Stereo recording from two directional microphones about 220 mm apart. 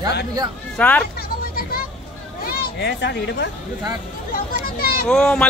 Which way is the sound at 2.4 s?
45° left (ahead or behind).